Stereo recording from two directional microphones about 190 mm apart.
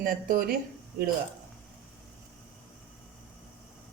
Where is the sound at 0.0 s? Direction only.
45° right (ahead or behind).